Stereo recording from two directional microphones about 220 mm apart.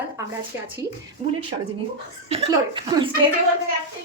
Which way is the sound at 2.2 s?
25° right (ahead or behind).